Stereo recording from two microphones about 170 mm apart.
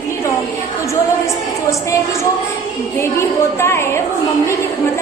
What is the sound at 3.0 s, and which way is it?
A woman's voice, 15° left (ahead or behind).